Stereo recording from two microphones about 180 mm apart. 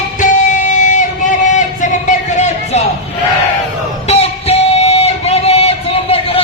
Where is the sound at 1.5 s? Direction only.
45° left (ahead or behind).